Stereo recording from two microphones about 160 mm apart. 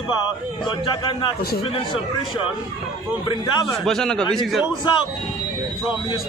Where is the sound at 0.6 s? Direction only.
30° left (ahead or behind).